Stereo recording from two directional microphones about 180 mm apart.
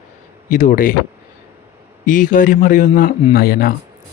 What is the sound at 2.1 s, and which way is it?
Speech, 45° left (ahead or behind).